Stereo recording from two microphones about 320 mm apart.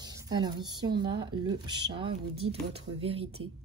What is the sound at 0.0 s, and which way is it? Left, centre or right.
A woman's voice, centre.